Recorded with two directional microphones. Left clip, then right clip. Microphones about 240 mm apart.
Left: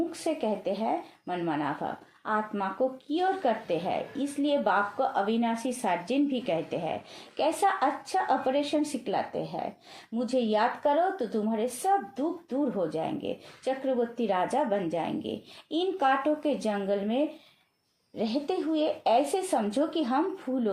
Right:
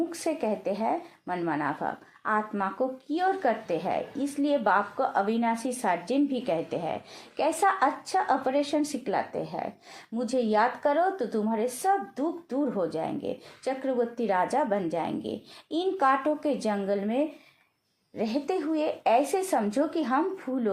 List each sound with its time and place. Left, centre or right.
0.3 s a woman's voice: right